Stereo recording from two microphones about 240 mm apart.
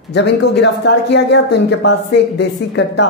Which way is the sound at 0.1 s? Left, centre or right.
Left.